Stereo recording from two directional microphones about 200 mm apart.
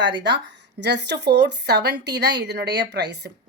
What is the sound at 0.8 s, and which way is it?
A woman's voice, 60° right (ahead or behind).